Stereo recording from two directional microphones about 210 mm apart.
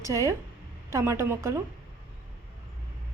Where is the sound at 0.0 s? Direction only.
15° right (ahead or behind).